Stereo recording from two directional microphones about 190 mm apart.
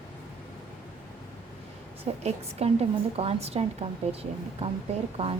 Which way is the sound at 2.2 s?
35° right (ahead or behind).